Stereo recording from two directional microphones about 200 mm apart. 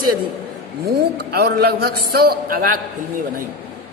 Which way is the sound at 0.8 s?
50° right (ahead or behind).